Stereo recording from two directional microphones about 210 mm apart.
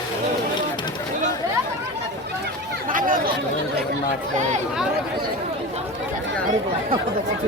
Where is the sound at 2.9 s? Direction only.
40° right (ahead or behind).